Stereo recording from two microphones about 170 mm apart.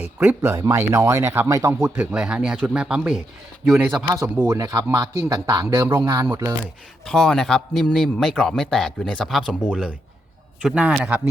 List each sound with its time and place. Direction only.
0.0 s speech: 10° right (ahead or behind)
1.8 s speech: 5° right (ahead or behind)
4.0 s a man's voice: 20° right (ahead or behind)
7.0 s speech: 5° left (ahead or behind)